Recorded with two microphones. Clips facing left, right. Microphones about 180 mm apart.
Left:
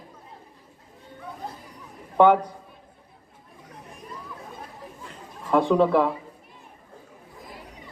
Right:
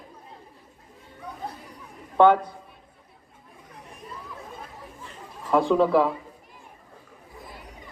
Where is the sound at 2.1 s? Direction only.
15° left (ahead or behind).